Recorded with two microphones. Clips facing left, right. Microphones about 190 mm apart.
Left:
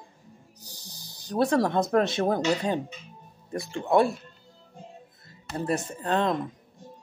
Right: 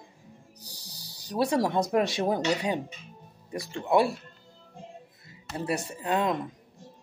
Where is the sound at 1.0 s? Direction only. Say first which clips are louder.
Left 2 dB; 10° right (ahead or behind).